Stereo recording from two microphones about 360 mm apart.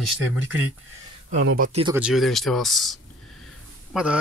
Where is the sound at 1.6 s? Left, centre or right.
Centre.